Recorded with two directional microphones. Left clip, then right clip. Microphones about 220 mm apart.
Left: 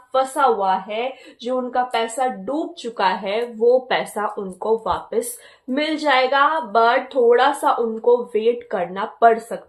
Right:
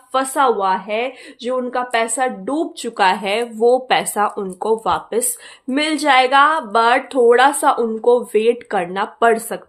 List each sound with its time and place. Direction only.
0.1 s a woman's voice: 50° right (ahead or behind)